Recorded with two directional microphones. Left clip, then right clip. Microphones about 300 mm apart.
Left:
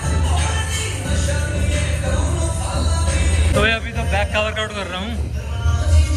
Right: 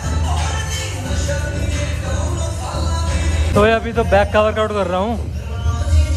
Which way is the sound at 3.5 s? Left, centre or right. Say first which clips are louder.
Right 5 dB; right.